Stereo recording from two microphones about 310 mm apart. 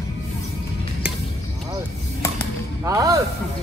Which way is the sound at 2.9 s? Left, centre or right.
Centre.